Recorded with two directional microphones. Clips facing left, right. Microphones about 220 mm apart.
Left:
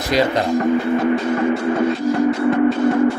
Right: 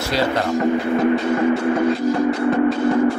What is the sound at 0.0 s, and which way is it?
Speech, 15° left (ahead or behind).